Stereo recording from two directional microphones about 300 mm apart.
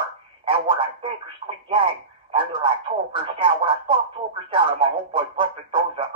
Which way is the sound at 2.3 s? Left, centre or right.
Centre.